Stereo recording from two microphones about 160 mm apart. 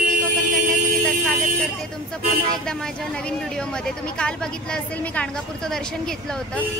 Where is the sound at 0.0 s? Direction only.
55° right (ahead or behind).